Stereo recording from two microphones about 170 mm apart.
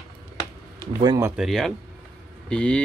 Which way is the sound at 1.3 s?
Centre (ahead or behind).